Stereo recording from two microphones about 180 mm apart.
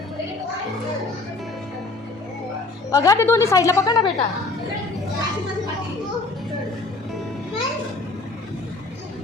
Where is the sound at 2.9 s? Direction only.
20° left (ahead or behind).